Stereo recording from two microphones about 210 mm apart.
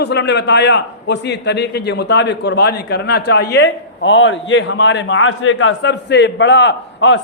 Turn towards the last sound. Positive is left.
turn(degrees=60)  # may be behind; listen again after turning